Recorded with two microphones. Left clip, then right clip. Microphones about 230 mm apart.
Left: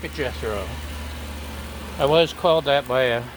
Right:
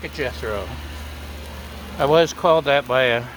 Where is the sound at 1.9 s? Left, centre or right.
Right.